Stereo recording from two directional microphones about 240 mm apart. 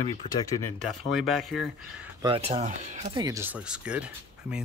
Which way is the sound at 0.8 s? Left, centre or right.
Centre.